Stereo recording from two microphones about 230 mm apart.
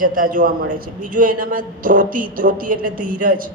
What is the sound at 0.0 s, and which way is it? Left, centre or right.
A woman's voice, right.